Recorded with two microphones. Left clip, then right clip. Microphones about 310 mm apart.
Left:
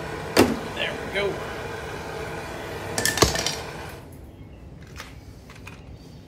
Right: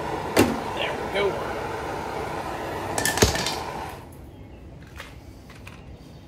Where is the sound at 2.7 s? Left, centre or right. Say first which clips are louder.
Right 3 dB; centre.